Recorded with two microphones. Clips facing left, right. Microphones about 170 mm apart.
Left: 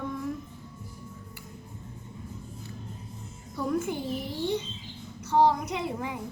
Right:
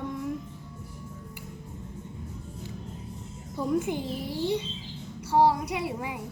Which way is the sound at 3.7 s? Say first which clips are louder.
Right 2 dB; 15° right (ahead or behind).